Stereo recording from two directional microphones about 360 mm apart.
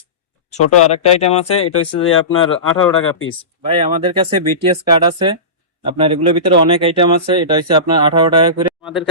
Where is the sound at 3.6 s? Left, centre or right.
Centre.